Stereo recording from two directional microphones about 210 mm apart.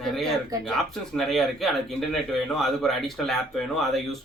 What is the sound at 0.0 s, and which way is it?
Speech, centre (ahead or behind).